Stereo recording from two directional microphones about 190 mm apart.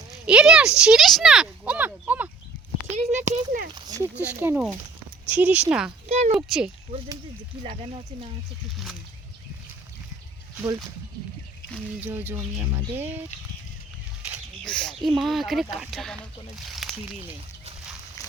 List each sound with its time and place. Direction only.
0.3 s speech: 5° right (ahead or behind)
2.9 s a child's voice: 40° right (ahead or behind)
3.8 s speech: 20° right (ahead or behind)
6.1 s a child's voice: 35° right (ahead or behind)
6.3 s speech: centre (ahead or behind)
10.6 s speech: 20° right (ahead or behind)
11.9 s speech: 10° right (ahead or behind)
14.6 s speech: 5° left (ahead or behind)
18.2 s a sound: 15° left (ahead or behind)